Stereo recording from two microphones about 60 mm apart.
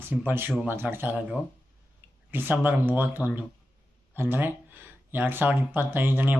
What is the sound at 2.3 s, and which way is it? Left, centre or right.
A man's voice, right.